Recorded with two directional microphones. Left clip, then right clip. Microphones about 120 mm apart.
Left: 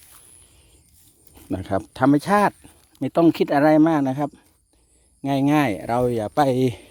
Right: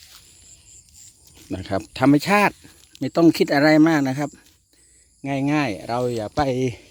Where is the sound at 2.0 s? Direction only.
10° right (ahead or behind).